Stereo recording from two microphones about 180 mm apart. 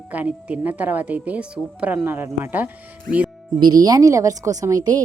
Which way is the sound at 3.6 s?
25° right (ahead or behind).